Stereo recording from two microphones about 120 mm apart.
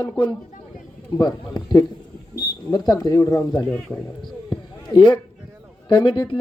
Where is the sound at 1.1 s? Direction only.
35° left (ahead or behind).